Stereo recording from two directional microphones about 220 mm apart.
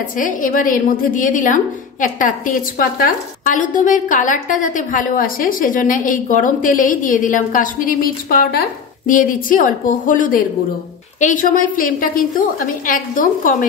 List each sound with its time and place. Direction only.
0.2 s a woman's voice: 35° left (ahead or behind)